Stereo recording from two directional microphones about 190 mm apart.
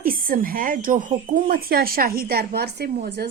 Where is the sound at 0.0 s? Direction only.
50° right (ahead or behind).